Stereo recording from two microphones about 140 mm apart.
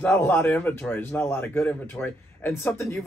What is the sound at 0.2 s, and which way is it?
Speech, 15° left (ahead or behind).